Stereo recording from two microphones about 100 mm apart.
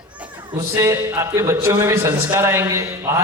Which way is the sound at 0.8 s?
30° right (ahead or behind).